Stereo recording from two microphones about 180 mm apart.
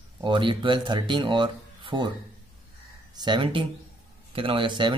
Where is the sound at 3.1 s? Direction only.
25° right (ahead or behind).